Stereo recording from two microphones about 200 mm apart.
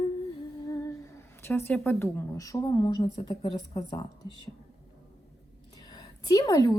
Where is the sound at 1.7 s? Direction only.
10° left (ahead or behind).